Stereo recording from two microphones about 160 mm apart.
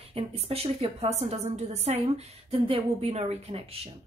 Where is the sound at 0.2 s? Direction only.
35° right (ahead or behind).